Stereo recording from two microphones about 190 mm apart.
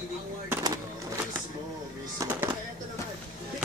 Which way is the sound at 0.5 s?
20° right (ahead or behind).